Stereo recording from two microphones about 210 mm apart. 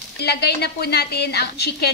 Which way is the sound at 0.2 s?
50° left (ahead or behind).